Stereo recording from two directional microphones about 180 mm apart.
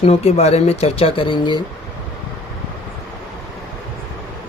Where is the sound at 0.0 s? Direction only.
35° left (ahead or behind).